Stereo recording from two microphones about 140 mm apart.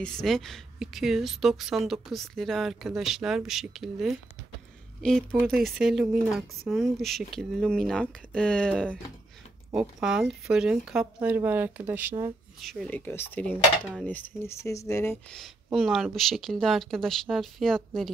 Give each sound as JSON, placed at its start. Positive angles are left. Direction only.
{"t": 0.0, "sound": "speech", "side_deg": 5}
{"t": 5.3, "sound": "speech", "side_deg": 0}
{"t": 9.8, "sound": "speech", "side_deg": -5}
{"t": 12.5, "sound": "speech", "side_deg": 0}
{"t": 12.9, "sound": "speech", "side_deg": 15}
{"t": 15.3, "sound": "speech", "side_deg": 0}